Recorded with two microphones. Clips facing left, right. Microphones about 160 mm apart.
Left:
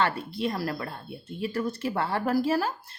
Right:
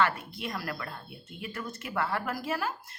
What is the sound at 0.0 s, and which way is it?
Speech, 30° left (ahead or behind).